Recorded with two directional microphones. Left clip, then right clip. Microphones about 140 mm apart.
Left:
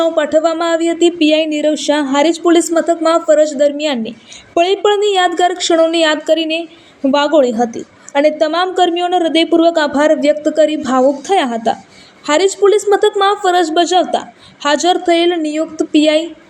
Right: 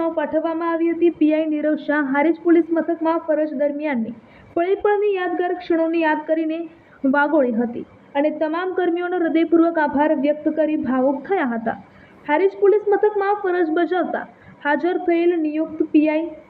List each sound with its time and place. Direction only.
0.0 s a woman's voice: 40° left (ahead or behind)
11.3 s a woman's voice: 25° left (ahead or behind)
12.2 s a woman's voice: 35° left (ahead or behind)